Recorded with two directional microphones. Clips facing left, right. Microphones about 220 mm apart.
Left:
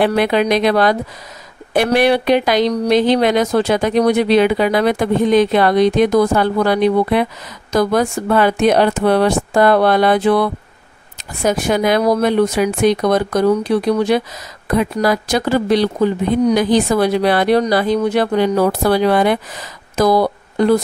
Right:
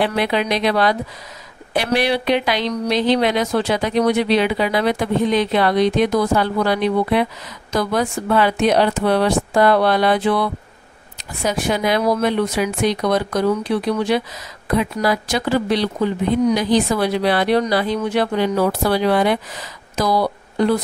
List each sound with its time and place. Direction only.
0.0 s speech: 50° left (ahead or behind)